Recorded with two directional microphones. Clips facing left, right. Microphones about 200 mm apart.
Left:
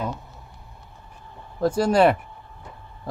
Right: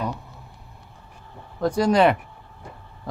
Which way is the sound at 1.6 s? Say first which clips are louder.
Even; 30° left (ahead or behind).